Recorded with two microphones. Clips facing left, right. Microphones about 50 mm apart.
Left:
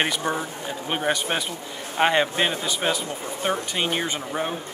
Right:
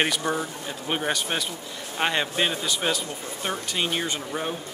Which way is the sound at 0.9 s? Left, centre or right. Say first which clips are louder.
Left 2 dB; centre.